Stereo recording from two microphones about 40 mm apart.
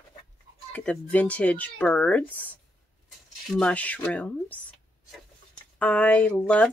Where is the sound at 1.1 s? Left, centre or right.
Left.